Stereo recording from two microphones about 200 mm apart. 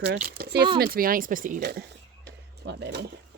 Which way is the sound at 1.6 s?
55° right (ahead or behind).